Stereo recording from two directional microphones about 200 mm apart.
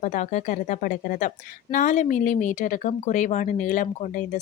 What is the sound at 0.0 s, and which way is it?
Speech, 40° left (ahead or behind).